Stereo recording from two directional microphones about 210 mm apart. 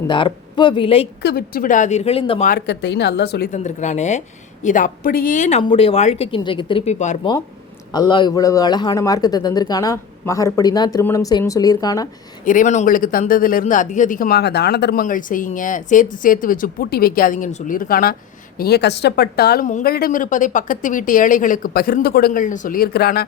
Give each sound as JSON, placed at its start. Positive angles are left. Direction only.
{"t": 0.1, "sound": "speech", "side_deg": 20}
{"t": 1.2, "sound": "speech", "side_deg": 50}
{"t": 2.5, "sound": "speech", "side_deg": 50}
{"t": 3.5, "sound": "speech", "side_deg": 35}
{"t": 7.9, "sound": "a man's voice", "side_deg": 20}
{"t": 12.5, "sound": "speech", "side_deg": 35}